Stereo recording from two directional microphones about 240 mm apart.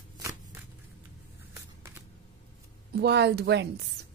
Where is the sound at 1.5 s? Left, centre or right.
Centre.